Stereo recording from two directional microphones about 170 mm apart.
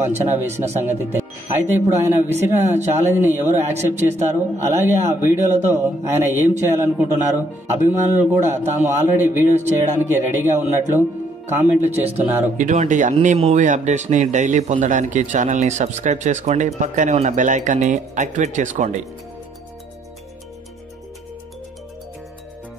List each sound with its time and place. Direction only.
0.0 s a man's voice: 15° right (ahead or behind)
3.9 s speech: 40° right (ahead or behind)
4.3 s a man's voice: 15° right (ahead or behind)
12.5 s speech: 50° right (ahead or behind)